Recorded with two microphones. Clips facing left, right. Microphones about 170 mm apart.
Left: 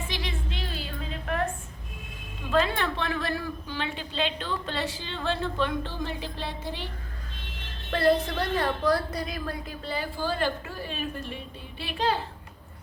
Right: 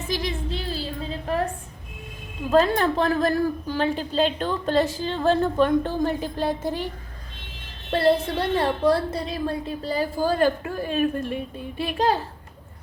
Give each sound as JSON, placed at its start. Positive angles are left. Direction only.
{"t": 0.1, "sound": "a sound", "side_deg": -40}
{"t": 2.5, "sound": "a woman's voice", "side_deg": -40}
{"t": 7.9, "sound": "a woman's voice", "side_deg": -30}